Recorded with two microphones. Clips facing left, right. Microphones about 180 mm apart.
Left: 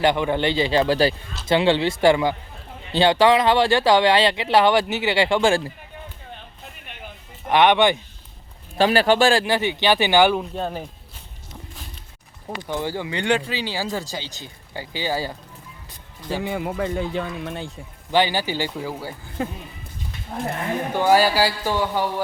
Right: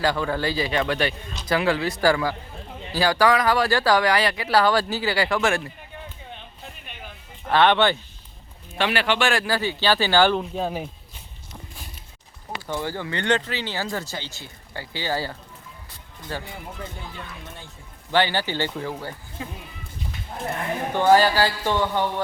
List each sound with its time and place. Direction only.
0.0 s speech: 20° left (ahead or behind)
7.4 s speech: 15° left (ahead or behind)
8.8 s speech: 35° left (ahead or behind); by 10.4 s 15° left (ahead or behind)
10.5 s speech: 5° right (ahead or behind)
12.6 s speech: 15° left (ahead or behind)
16.4 s speech: 80° left
18.1 s speech: 15° left (ahead or behind)
19.4 s speech: 60° left (ahead or behind)
20.9 s speech: 10° left (ahead or behind)